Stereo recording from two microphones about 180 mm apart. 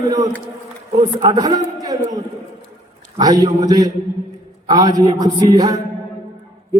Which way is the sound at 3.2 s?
20° right (ahead or behind).